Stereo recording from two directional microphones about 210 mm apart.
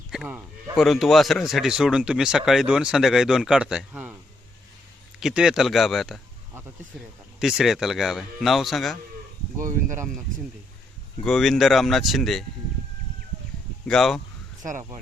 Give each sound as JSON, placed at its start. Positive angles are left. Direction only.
{"t": 0.1, "sound": "a man's voice", "side_deg": -5}
{"t": 5.2, "sound": "a man's voice", "side_deg": -5}
{"t": 7.3, "sound": "a man's voice", "side_deg": 0}
{"t": 9.6, "sound": "speech", "side_deg": -40}
{"t": 11.2, "sound": "a man's voice", "side_deg": 0}
{"t": 13.8, "sound": "a man's voice", "side_deg": 0}
{"t": 14.6, "sound": "speech", "side_deg": -40}